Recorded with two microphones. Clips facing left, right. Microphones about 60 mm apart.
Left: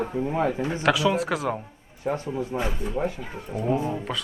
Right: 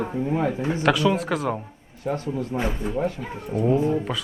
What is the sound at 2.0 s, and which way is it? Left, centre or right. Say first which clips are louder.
Speech: right 1 dB; centre.